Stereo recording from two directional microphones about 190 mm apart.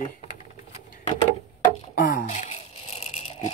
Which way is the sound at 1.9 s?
50° left (ahead or behind).